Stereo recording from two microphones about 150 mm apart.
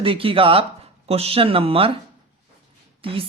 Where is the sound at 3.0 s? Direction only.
35° right (ahead or behind).